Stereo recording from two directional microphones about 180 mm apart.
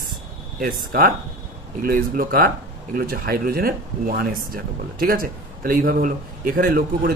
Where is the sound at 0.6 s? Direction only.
55° right (ahead or behind).